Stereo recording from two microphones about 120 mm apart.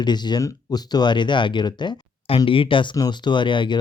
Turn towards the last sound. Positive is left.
turn(degrees=40)  # may be behind; listen again after turning